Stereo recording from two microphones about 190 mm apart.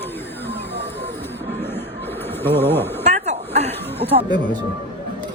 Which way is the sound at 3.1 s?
35° right (ahead or behind).